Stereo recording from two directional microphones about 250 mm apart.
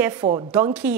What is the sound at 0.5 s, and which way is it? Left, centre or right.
Speech, centre.